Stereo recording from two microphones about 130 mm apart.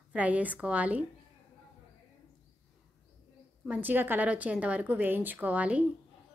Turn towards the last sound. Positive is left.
turn(degrees=-10)  # may be behind; listen again after turning